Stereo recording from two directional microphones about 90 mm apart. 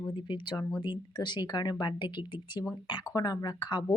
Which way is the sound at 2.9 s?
50° left (ahead or behind).